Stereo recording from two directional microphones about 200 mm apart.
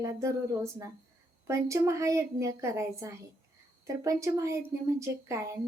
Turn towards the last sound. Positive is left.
turn(degrees=-15)  # may be behind; listen again after turning